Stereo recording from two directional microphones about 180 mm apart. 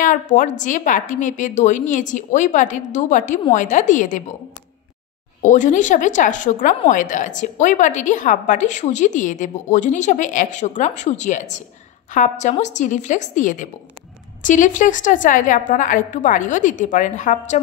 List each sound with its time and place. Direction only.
0.0 s a woman's voice: 45° left (ahead or behind)
5.4 s a woman's voice: 45° left (ahead or behind)